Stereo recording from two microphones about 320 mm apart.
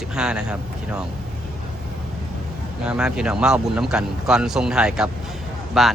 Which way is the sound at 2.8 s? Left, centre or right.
Centre.